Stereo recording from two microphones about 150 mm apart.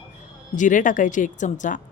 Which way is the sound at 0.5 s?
60° left (ahead or behind).